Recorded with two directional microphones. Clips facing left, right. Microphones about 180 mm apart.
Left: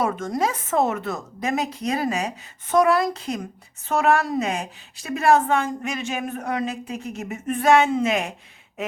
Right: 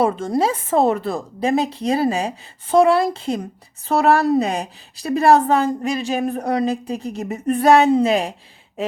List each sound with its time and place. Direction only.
0.0 s a woman's voice: 30° right (ahead or behind)